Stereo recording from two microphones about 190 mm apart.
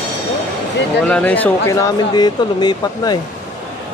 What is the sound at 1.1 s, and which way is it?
Speech, 5° left (ahead or behind).